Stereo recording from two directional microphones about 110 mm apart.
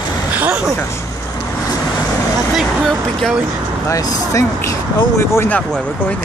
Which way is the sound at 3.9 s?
30° left (ahead or behind).